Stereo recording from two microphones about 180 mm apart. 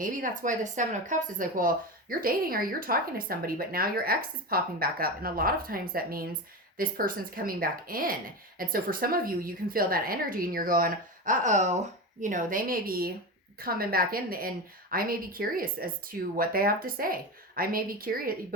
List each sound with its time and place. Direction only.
0.0 s a woman's voice: 50° right (ahead or behind)